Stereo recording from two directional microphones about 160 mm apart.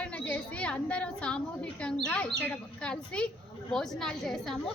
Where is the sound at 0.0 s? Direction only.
10° left (ahead or behind).